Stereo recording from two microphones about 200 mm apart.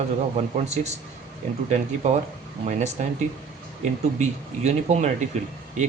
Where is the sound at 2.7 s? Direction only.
35° right (ahead or behind).